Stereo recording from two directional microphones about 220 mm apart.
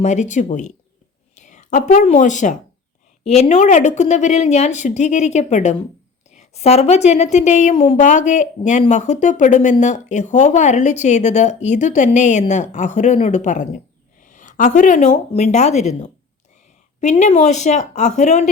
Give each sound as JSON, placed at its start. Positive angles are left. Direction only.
{"t": 0.0, "sound": "a woman's voice", "side_deg": 30}